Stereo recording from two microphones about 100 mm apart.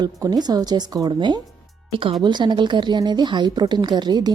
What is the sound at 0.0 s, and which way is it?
A woman's voice, 45° right (ahead or behind).